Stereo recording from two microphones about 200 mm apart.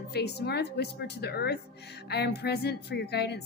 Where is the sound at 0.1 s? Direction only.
55° left (ahead or behind).